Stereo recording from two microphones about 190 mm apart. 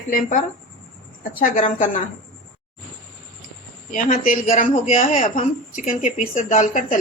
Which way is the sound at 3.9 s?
45° left (ahead or behind).